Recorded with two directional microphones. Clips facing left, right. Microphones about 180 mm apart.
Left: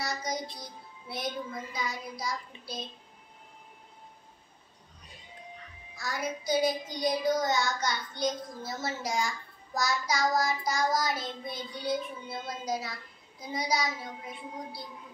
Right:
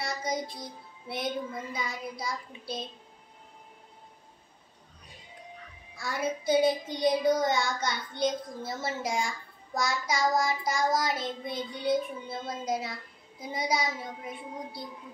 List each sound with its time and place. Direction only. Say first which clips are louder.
0.0 s music: right 2 dB; 25° right (ahead or behind)
1.0 s child singing: right 3 dB; 25° right (ahead or behind)
5.9 s child singing: right 3 dB; 25° right (ahead or behind)